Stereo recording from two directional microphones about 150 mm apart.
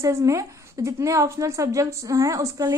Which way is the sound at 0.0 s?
20° right (ahead or behind).